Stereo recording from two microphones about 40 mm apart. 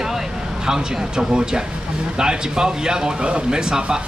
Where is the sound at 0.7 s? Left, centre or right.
Centre.